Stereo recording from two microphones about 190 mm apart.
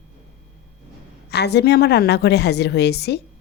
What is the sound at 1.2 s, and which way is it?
A woman's voice, 60° left (ahead or behind).